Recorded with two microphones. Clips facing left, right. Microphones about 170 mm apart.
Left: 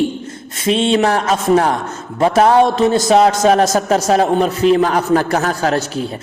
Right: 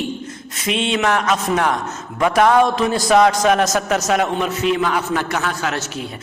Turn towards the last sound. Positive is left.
turn(degrees=35)  # may be behind; listen again after turning